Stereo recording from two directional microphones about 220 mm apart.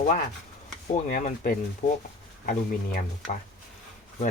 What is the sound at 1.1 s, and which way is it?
Speech, 40° left (ahead or behind).